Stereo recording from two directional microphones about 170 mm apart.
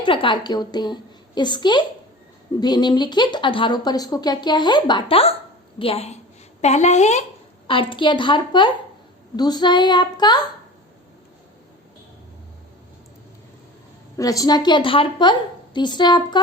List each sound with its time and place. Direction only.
0.0 s a woman's voice: 30° left (ahead or behind)
7.7 s speech: 30° left (ahead or behind)
14.2 s speech: 20° left (ahead or behind)